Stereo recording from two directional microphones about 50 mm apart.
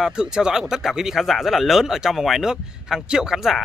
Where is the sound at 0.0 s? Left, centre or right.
Centre.